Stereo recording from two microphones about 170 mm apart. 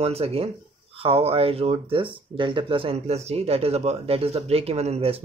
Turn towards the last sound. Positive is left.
turn(degrees=-35)  # may be behind; listen again after turning